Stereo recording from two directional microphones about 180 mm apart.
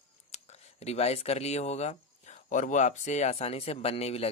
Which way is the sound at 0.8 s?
35° left (ahead or behind).